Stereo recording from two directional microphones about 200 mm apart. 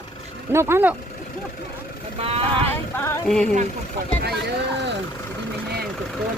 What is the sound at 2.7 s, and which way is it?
Music, 10° left (ahead or behind).